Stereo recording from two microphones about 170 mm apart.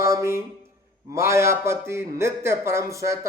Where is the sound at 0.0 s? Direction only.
15° right (ahead or behind).